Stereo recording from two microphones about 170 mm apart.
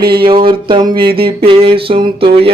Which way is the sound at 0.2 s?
30° right (ahead or behind).